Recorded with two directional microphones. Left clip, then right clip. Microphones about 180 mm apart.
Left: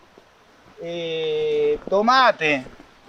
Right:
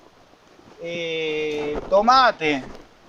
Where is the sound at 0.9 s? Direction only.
35° left (ahead or behind).